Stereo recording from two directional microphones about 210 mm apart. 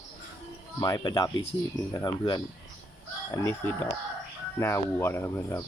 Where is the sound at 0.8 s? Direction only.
20° left (ahead or behind).